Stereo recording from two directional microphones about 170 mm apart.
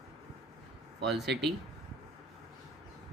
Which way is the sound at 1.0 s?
Centre (ahead or behind).